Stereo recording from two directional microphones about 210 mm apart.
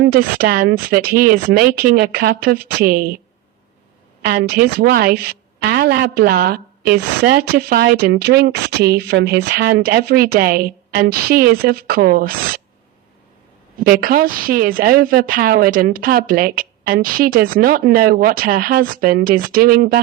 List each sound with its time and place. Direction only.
0.0 s a woman's voice: 45° right (ahead or behind)
4.2 s a woman's voice: 50° right (ahead or behind)
13.7 s a woman's voice: 45° right (ahead or behind)